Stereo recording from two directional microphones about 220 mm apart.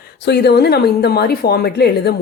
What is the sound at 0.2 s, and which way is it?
Speech, 50° left (ahead or behind).